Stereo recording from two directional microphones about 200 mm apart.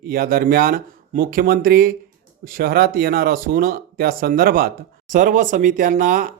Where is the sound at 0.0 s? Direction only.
45° right (ahead or behind).